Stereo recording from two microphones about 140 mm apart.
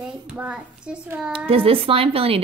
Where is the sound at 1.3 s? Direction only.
40° right (ahead or behind).